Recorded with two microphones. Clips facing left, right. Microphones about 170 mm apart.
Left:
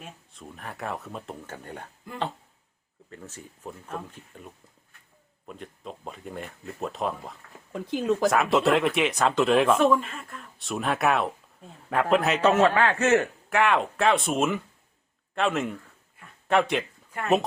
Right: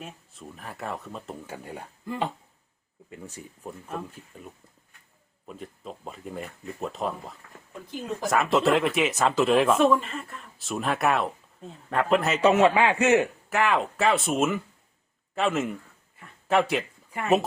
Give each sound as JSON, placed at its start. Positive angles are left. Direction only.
{"t": 0.0, "sound": "speech", "side_deg": 0}
{"t": 3.1, "sound": "speech", "side_deg": -10}
{"t": 7.7, "sound": "speech", "side_deg": 75}
{"t": 8.3, "sound": "speech", "side_deg": 0}
{"t": 12.4, "sound": "speech", "side_deg": -10}
{"t": 13.5, "sound": "speech", "side_deg": 0}